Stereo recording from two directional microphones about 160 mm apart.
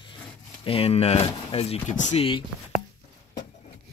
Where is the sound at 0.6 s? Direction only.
35° left (ahead or behind).